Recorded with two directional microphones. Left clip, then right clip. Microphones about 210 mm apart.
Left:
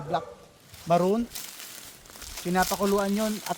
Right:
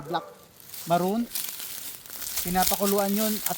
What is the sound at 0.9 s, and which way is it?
Speech, 30° left (ahead or behind).